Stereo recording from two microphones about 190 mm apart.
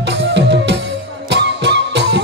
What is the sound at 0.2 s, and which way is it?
Music, 65° right (ahead or behind).